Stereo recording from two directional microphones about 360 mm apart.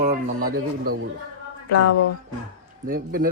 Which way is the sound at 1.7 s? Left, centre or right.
Left.